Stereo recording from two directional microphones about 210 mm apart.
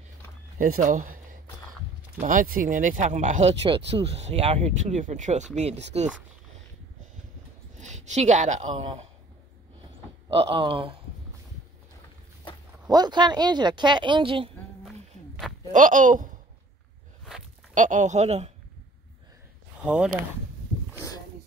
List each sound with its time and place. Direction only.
0.6 s speech: 35° right (ahead or behind)
7.7 s a woman's voice: 35° right (ahead or behind)
10.2 s speech: 25° right (ahead or behind)
12.8 s speech: 20° right (ahead or behind)
15.7 s speech: 40° right (ahead or behind)
17.7 s speech: 35° right (ahead or behind)
19.8 s speech: 5° right (ahead or behind)